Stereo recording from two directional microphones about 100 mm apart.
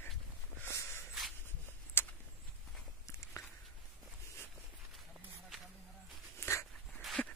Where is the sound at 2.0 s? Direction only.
20° left (ahead or behind).